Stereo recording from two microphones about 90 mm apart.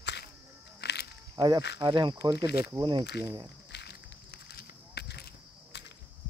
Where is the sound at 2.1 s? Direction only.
35° right (ahead or behind).